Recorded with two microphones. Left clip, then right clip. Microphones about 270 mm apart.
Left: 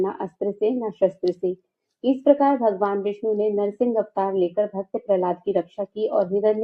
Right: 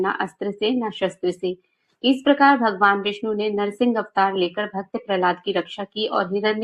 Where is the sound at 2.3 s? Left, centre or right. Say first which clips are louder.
Right 1 dB; right.